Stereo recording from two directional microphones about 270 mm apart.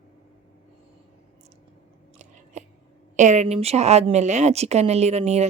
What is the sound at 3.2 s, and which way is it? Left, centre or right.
Speech, right.